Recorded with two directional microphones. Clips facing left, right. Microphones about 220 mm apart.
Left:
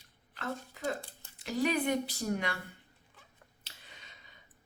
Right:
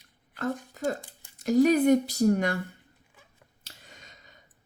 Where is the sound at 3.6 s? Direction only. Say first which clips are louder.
Right 5 dB; 45° right (ahead or behind).